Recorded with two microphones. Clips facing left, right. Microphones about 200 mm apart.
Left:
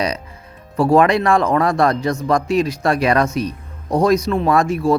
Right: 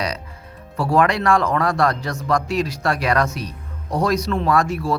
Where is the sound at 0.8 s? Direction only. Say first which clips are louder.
Left 5 dB; 20° left (ahead or behind).